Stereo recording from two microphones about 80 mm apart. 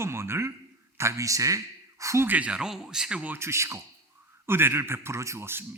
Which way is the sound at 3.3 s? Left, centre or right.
Right.